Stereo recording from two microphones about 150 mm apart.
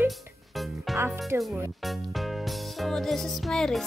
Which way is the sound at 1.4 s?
Centre (ahead or behind).